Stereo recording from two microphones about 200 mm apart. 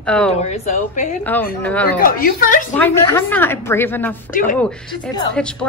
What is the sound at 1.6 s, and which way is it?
Speech, 10° left (ahead or behind).